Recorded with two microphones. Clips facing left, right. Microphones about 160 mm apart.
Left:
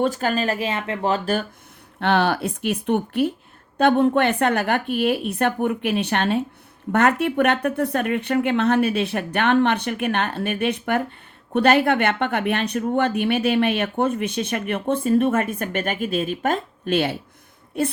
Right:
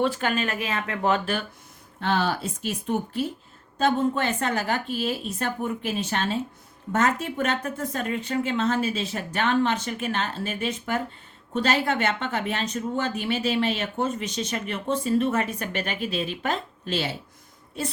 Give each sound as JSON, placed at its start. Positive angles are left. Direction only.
{"t": 0.0, "sound": "speech", "side_deg": 40}
{"t": 2.0, "sound": "speech", "side_deg": 65}